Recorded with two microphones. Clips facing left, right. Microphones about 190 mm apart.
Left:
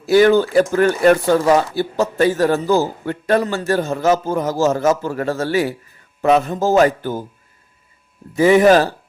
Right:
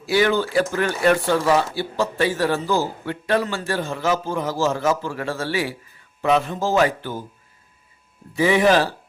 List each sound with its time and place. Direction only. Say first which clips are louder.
0.0 s speech: left 7 dB; 45° left (ahead or behind)
8.4 s speech: left 6 dB; 45° left (ahead or behind)